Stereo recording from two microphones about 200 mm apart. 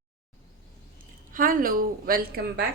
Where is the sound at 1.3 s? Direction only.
45° right (ahead or behind).